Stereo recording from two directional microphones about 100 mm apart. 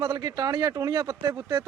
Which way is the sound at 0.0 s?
40° right (ahead or behind).